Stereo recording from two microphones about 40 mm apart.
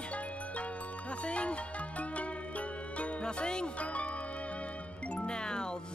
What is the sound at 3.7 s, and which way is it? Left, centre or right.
Music, left.